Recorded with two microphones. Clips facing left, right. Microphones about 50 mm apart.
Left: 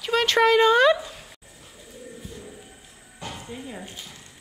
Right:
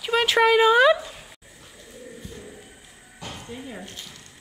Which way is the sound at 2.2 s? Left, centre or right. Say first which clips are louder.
Even; centre.